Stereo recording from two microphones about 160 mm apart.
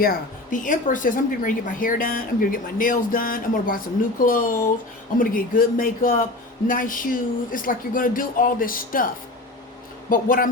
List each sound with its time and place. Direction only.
0.5 s speech: 55° left (ahead or behind)
10.1 s speech: 60° left (ahead or behind)